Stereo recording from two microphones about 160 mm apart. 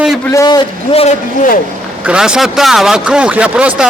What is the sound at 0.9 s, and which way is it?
Speech, 40° left (ahead or behind).